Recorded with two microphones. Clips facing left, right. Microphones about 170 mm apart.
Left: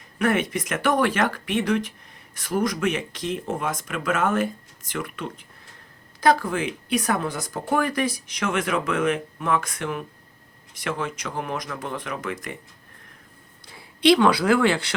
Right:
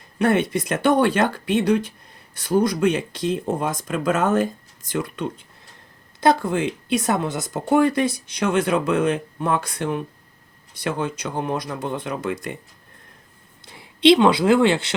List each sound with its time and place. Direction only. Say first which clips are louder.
0.2 s speech: right 3 dB; 30° right (ahead or behind)
13.7 s a woman's voice: right 3 dB; 20° right (ahead or behind)